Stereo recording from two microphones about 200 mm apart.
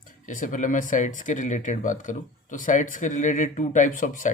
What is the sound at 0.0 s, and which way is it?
Speech, 40° left (ahead or behind).